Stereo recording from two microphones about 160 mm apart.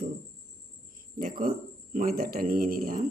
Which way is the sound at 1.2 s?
60° right (ahead or behind).